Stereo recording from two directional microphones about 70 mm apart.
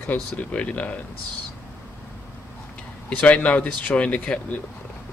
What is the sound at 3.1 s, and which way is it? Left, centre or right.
Speech, centre.